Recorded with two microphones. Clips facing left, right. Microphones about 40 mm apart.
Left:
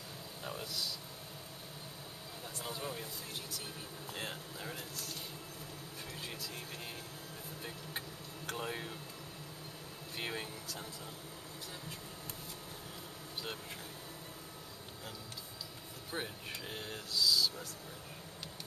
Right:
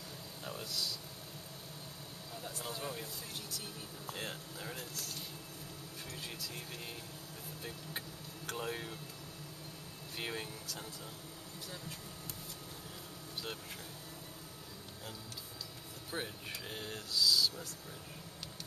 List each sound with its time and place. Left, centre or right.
0.4 s speech: centre
2.4 s speech: centre
4.1 s speech: centre
6.2 s speech: centre
8.5 s speech: centre
10.1 s speech: centre
16.1 s speech: centre